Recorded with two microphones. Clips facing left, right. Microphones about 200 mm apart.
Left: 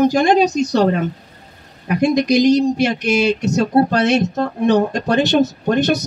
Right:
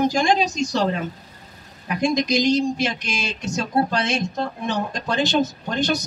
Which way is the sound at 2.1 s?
60° left (ahead or behind).